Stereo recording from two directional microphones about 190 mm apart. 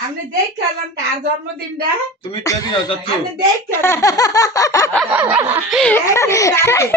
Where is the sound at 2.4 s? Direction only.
20° left (ahead or behind).